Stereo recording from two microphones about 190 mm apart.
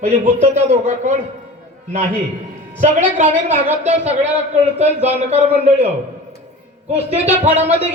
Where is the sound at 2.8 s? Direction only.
40° right (ahead or behind).